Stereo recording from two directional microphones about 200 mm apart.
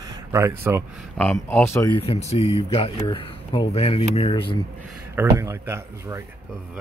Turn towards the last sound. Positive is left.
turn(degrees=-10)  # may be behind; listen again after turning